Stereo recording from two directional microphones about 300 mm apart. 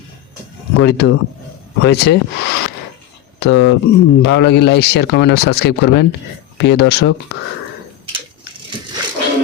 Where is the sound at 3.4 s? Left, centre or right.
Left.